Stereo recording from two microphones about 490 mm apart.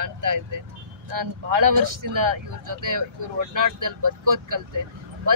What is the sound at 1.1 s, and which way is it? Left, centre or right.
Speech, right.